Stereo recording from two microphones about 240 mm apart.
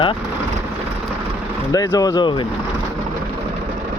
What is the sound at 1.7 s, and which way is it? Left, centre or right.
Speech, centre.